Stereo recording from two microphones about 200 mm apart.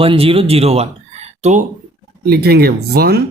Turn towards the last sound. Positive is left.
turn(degrees=-50)  # may be behind; listen again after turning